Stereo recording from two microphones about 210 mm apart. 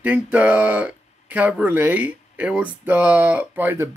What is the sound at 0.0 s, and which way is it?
Speech, 5° right (ahead or behind).